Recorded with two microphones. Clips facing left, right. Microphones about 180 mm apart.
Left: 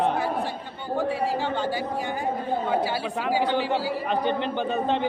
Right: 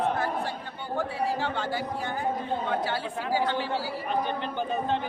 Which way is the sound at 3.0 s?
90° left.